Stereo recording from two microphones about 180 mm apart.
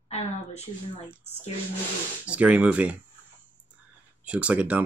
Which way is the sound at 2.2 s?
5° right (ahead or behind).